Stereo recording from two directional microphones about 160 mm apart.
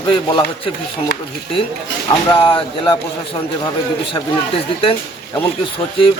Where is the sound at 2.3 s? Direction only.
35° left (ahead or behind).